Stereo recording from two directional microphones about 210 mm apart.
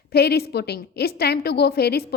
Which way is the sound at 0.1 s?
50° left (ahead or behind).